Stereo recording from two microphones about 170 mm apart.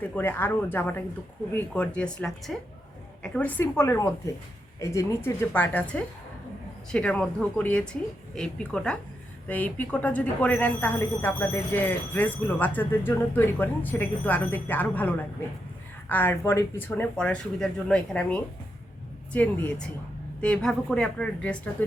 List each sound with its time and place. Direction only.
0.0 s a woman's voice: 10° left (ahead or behind)